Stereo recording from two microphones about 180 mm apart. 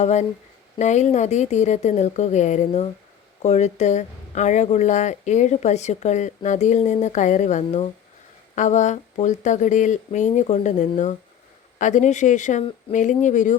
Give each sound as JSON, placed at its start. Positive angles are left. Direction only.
{"t": 0.0, "sound": "speech", "side_deg": 40}